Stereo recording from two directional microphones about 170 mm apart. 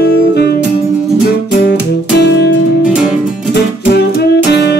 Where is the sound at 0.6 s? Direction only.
5° right (ahead or behind).